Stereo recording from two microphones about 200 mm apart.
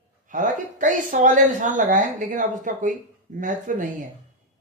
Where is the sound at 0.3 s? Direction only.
40° right (ahead or behind).